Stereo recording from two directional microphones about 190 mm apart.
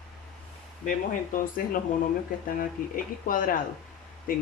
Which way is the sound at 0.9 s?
45° left (ahead or behind).